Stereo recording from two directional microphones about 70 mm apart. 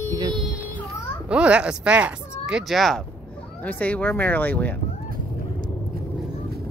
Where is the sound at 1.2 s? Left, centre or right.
Centre.